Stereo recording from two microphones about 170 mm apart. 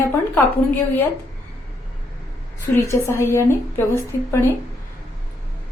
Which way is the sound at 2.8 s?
15° left (ahead or behind).